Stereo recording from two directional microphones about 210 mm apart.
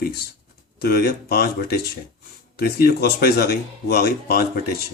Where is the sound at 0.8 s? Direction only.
50° left (ahead or behind).